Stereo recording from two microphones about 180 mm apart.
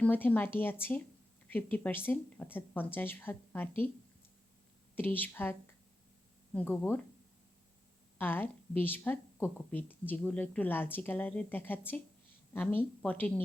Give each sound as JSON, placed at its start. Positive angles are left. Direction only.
{"t": 0.0, "sound": "a woman's voice", "side_deg": 10}
{"t": 4.9, "sound": "a woman's voice", "side_deg": 10}
{"t": 8.2, "sound": "a woman's voice", "side_deg": 10}